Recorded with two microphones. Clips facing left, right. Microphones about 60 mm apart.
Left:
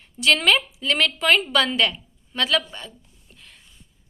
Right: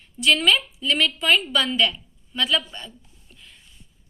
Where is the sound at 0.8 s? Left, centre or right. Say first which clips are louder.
Even; left.